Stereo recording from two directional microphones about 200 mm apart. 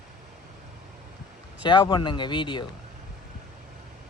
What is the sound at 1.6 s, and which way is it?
Speech, 20° left (ahead or behind).